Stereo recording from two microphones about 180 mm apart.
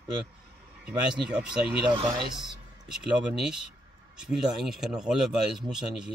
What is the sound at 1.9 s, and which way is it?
Speech, 25° right (ahead or behind).